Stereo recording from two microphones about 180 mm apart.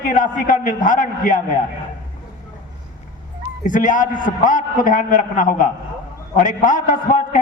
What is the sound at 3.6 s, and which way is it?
A man's voice, 45° left (ahead or behind).